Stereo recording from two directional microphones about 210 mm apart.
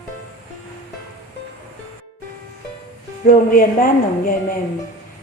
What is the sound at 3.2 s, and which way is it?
Speech, 40° left (ahead or behind).